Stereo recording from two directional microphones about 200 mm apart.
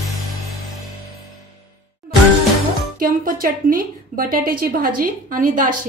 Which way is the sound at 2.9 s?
45° right (ahead or behind).